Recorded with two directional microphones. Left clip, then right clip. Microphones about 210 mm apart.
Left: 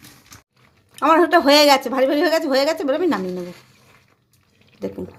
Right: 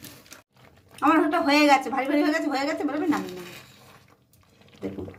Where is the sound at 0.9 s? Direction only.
45° left (ahead or behind).